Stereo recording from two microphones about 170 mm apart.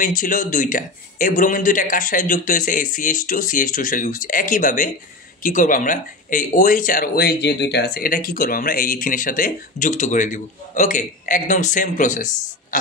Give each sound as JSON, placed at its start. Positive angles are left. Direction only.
{"t": 0.0, "sound": "speech", "side_deg": 50}